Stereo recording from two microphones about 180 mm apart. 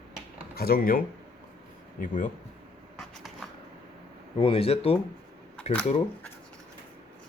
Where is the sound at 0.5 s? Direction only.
55° left (ahead or behind).